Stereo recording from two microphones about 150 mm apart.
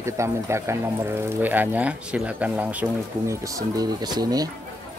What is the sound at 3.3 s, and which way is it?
Speech, 25° right (ahead or behind).